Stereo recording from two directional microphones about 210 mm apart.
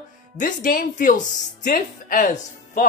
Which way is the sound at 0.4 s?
40° left (ahead or behind).